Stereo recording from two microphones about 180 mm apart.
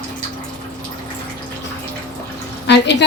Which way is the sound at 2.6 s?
70° left (ahead or behind).